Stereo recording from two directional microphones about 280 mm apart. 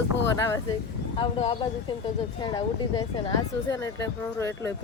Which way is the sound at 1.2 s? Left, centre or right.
Centre.